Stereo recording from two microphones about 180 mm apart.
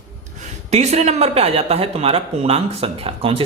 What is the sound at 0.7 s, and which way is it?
Speech, 40° right (ahead or behind).